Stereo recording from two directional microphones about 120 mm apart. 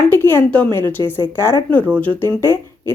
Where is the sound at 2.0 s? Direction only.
10° left (ahead or behind).